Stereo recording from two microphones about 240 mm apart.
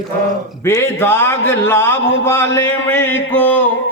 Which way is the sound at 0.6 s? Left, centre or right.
Centre.